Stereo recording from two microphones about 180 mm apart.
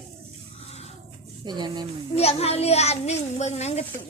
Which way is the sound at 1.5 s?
25° right (ahead or behind).